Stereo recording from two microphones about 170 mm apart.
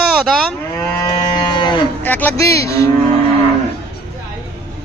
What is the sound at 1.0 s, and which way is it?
Cattle, 25° left (ahead or behind).